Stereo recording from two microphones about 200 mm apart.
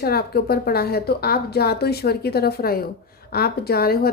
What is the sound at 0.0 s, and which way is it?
Speech, 50° left (ahead or behind).